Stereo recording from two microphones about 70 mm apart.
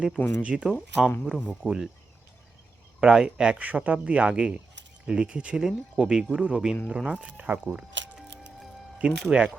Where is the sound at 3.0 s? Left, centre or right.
Centre.